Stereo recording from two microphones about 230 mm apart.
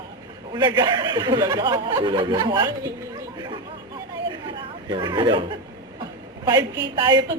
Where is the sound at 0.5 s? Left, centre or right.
Centre.